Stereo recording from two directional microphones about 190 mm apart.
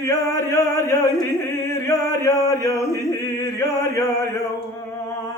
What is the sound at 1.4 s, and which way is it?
Male singing, 15° left (ahead or behind).